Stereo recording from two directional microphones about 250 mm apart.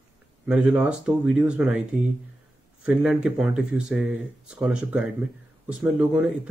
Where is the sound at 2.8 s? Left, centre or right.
Centre.